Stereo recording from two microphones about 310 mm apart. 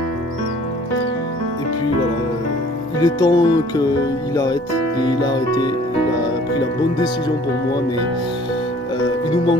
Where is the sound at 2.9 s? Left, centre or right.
Centre.